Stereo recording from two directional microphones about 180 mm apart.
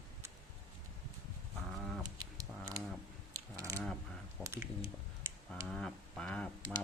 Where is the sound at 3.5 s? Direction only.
20° right (ahead or behind).